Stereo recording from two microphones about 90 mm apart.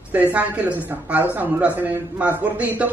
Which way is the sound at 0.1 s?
15° right (ahead or behind).